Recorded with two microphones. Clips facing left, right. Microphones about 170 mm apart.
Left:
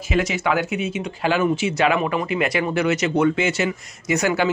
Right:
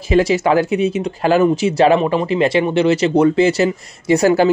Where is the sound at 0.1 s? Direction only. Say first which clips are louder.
Right 8 dB; 35° right (ahead or behind).